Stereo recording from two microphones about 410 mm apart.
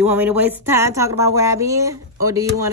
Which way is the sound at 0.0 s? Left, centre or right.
Centre.